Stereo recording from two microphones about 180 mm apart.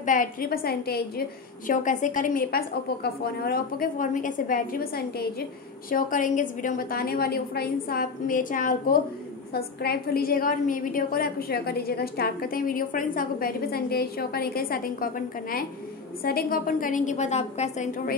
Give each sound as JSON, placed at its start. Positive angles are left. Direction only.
{"t": 0.0, "sound": "a woman's voice", "side_deg": 45}
{"t": 1.7, "sound": "a woman's voice", "side_deg": 45}
{"t": 9.5, "sound": "a woman's voice", "side_deg": 60}